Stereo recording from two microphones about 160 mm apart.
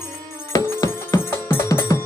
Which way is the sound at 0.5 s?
20° left (ahead or behind).